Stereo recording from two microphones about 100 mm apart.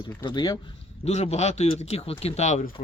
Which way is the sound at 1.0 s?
90° left.